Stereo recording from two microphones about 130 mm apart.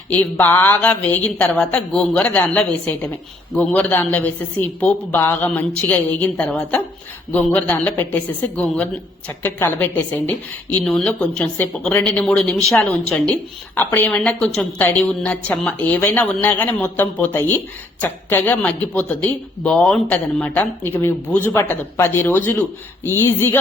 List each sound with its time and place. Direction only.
0.3 s a woman's voice: 15° left (ahead or behind)